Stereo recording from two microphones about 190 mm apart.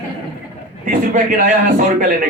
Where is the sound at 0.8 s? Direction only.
45° right (ahead or behind).